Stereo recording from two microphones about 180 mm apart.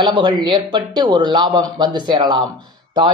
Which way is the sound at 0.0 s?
25° right (ahead or behind).